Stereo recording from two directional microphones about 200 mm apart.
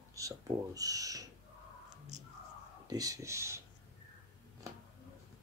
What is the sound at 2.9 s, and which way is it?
Speech, 15° right (ahead or behind).